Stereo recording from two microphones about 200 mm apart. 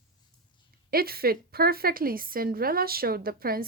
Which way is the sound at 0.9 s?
50° right (ahead or behind).